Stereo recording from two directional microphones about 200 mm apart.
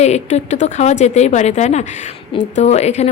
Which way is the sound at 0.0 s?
35° left (ahead or behind).